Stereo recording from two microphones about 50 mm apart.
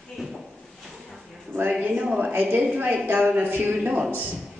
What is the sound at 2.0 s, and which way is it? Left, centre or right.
Speech, centre.